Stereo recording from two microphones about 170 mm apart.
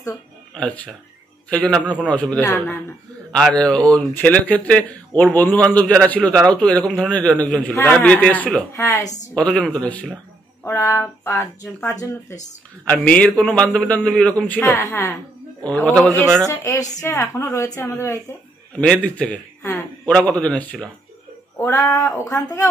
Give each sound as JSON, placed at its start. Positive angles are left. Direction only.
{"t": 0.6, "sound": "speech", "side_deg": 5}
{"t": 9.0, "sound": "a woman's voice", "side_deg": 45}
{"t": 9.3, "sound": "speech", "side_deg": 5}
{"t": 16.4, "sound": "speech", "side_deg": 20}
{"t": 18.8, "sound": "speech", "side_deg": 5}
{"t": 21.5, "sound": "speech", "side_deg": 15}